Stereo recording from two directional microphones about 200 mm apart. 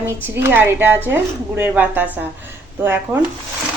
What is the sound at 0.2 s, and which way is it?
A woman's voice, 10° right (ahead or behind).